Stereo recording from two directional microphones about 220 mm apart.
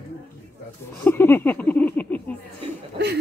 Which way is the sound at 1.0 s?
10° left (ahead or behind).